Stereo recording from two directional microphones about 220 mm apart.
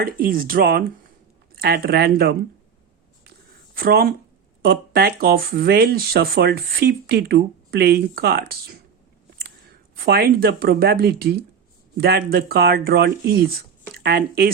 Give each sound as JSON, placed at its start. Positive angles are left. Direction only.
{"t": 0.0, "sound": "speech", "side_deg": -40}
{"t": 3.8, "sound": "speech", "side_deg": -45}
{"t": 10.0, "sound": "speech", "side_deg": -45}